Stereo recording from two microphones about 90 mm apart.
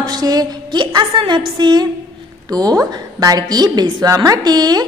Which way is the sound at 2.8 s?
50° right (ahead or behind).